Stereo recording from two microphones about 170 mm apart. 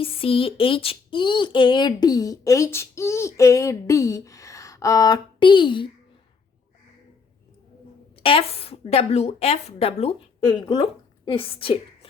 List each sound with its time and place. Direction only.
0.0 s speech: 35° left (ahead or behind)
8.1 s a woman's voice: 30° left (ahead or behind)